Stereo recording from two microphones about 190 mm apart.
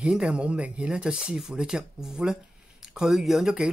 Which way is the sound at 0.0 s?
5° right (ahead or behind).